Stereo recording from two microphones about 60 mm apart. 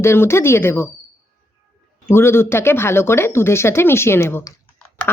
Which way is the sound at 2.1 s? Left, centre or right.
Left.